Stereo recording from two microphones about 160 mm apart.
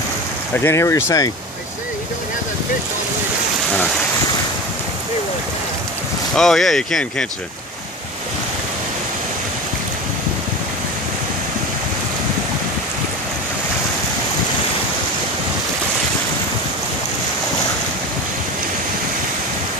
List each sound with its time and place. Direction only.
0.6 s speech: 15° left (ahead or behind)
6.3 s speech: 5° left (ahead or behind)